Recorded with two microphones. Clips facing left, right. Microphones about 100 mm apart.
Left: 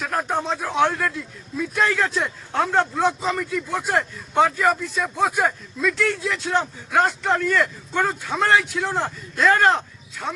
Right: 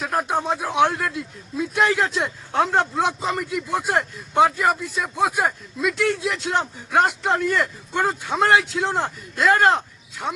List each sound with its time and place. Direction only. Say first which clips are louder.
0.0 s speech: right 1 dB; 15° right (ahead or behind)